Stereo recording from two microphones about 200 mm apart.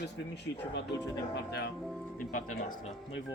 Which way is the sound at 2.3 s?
40° left (ahead or behind).